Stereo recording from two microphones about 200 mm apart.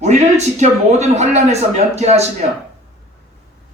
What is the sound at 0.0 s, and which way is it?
A man's voice, 35° right (ahead or behind).